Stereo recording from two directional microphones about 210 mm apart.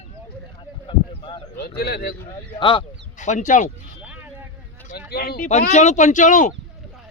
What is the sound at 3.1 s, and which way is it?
Speech, 35° left (ahead or behind).